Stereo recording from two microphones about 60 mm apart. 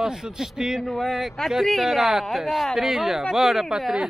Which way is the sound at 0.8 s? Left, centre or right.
Centre.